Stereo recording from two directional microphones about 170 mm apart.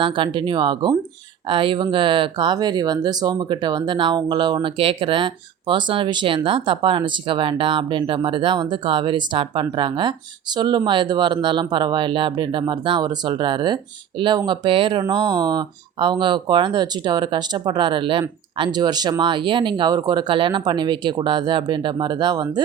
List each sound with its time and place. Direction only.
0.0 s speech: 30° right (ahead or behind)